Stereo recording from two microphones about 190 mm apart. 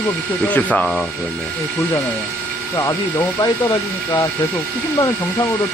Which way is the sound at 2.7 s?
20° left (ahead or behind).